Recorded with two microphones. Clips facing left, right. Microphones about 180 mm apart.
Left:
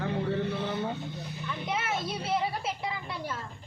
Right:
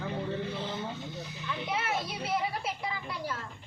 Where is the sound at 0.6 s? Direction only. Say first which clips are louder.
Left 5 dB; 65° left (ahead or behind).